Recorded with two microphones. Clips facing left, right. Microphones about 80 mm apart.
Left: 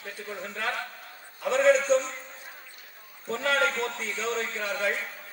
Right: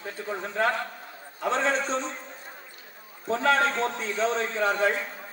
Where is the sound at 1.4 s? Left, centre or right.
Right.